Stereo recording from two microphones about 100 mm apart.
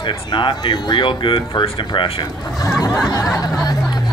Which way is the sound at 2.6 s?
40° left (ahead or behind).